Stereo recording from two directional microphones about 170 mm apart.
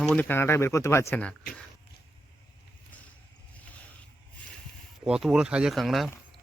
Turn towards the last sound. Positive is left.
turn(degrees=0)  # may be behind; listen again after turning